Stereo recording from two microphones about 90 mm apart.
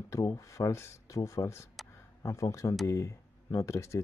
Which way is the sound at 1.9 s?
35° left (ahead or behind).